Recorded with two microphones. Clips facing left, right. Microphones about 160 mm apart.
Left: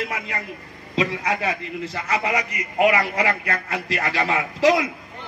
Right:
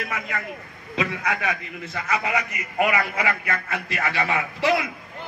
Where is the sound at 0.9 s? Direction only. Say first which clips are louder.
Left 3 dB; 30° left (ahead or behind).